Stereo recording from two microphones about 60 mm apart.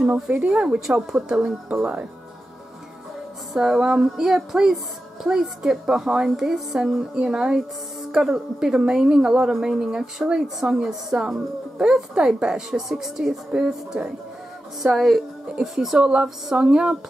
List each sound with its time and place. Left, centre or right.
0.1 s a woman's voice: right
3.5 s a woman's voice: centre
14.8 s speech: centre
16.0 s a woman's voice: centre